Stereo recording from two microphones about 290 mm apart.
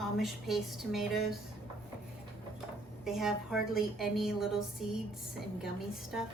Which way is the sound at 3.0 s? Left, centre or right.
Centre.